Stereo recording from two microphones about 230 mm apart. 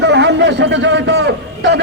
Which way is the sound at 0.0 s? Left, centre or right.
Right.